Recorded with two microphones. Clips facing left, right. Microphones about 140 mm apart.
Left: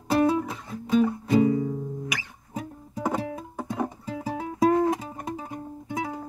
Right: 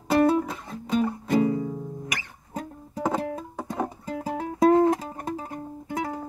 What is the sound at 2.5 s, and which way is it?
Music, 5° left (ahead or behind).